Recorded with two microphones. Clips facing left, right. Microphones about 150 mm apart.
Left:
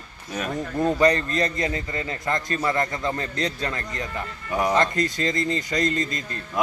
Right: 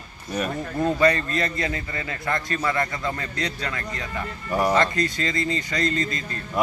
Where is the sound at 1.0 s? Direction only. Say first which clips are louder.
Left 1 dB; 35° left (ahead or behind).